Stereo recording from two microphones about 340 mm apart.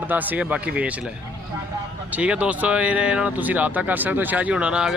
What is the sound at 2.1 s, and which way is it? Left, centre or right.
Speech, centre.